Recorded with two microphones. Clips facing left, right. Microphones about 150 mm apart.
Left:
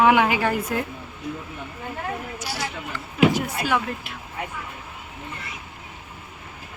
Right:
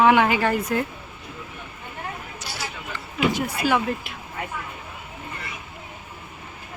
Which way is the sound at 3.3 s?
Centre (ahead or behind).